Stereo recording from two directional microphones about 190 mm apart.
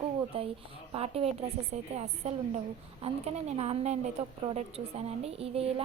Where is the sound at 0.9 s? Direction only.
30° right (ahead or behind).